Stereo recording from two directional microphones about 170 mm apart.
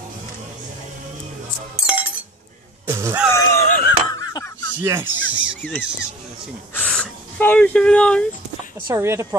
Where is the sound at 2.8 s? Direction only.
15° right (ahead or behind).